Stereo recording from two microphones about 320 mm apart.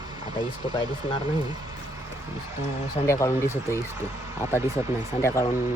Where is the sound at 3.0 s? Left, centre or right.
Centre.